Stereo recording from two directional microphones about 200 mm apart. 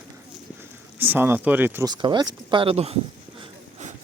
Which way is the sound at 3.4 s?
35° right (ahead or behind).